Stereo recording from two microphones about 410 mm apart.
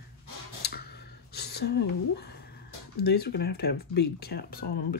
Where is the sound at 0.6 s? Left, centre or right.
Left.